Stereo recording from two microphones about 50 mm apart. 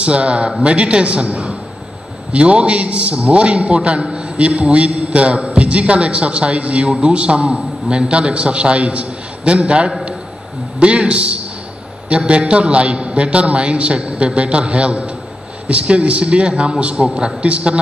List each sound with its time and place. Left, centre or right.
0.0 s a man's voice: right